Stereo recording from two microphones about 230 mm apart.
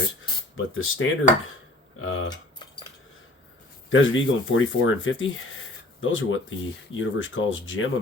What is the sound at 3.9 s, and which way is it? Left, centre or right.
Speech, left.